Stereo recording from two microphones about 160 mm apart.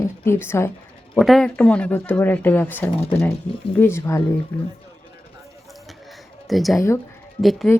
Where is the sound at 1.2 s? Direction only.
Centre (ahead or behind); by 4.2 s 15° left (ahead or behind).